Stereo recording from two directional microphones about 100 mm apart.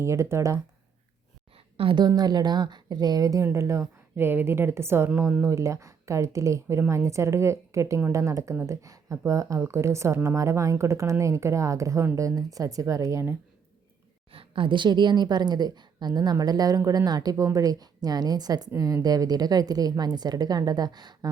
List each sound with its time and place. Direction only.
0.0 s speech: 30° right (ahead or behind)
1.7 s a woman's voice: 65° right (ahead or behind)
2.0 s a woman's voice: 45° right (ahead or behind)
14.3 s a woman's voice: 60° right (ahead or behind)